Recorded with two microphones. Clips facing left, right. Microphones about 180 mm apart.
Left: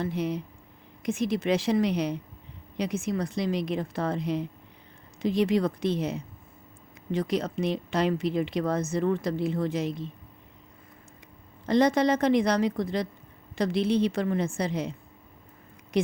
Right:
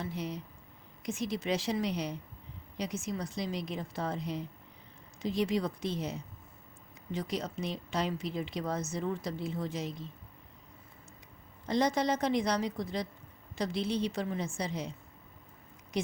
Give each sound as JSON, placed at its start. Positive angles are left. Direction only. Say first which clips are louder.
{"t": 0.0, "sound": "a woman's voice", "louder": "left 8 dB", "side_deg": 65}
{"t": 11.6, "sound": "a woman's voice", "louder": "left 7 dB", "side_deg": 65}